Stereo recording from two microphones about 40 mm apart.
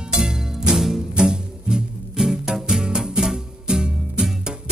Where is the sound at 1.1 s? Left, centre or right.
Centre.